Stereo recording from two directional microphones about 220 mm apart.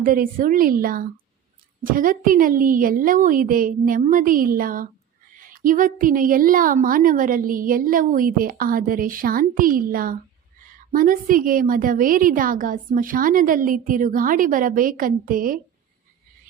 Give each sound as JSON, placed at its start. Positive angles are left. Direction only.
{"t": 0.0, "sound": "a woman's voice", "side_deg": -40}